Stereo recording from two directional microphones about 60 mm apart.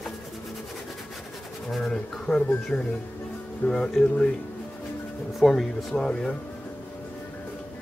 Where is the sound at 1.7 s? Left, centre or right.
Centre.